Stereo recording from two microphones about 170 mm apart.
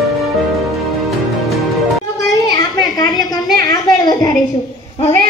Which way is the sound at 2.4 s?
25° left (ahead or behind).